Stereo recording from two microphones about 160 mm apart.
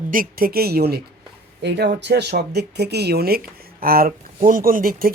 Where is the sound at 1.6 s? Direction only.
90° right.